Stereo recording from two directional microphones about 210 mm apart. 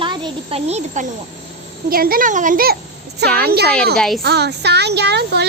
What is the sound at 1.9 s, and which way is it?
Speech, 45° right (ahead or behind).